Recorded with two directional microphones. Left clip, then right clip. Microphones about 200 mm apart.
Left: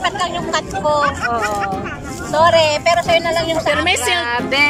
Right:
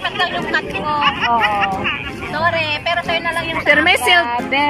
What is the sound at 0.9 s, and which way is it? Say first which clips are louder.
Speech: right 5 dB; 70° left (ahead or behind).